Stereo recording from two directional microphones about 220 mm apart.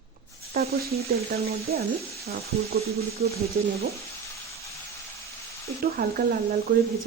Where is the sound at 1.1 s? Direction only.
45° right (ahead or behind).